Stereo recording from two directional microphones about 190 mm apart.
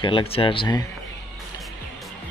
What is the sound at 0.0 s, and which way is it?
Speech, 30° left (ahead or behind).